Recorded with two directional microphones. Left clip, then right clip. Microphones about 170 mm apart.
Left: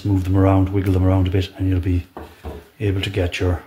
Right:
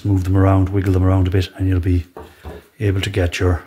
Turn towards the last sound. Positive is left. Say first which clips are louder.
# right 2 dB
turn(degrees=-40)  # may be behind; listen again after turning